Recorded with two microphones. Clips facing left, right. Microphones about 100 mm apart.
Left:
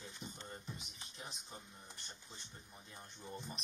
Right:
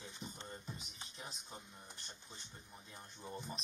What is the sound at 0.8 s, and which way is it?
Speech, 40° right (ahead or behind).